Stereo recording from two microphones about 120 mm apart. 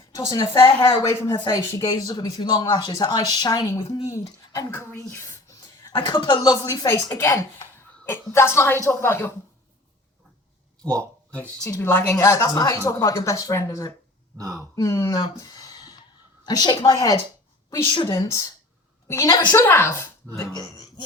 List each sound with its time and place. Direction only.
0.1 s a woman's voice: 30° left (ahead or behind)
11.6 s a woman's voice: 25° left (ahead or behind)
15.2 s a sound: 30° left (ahead or behind)
16.5 s a woman's voice: 35° left (ahead or behind)
19.5 s a woman's voice: 20° left (ahead or behind)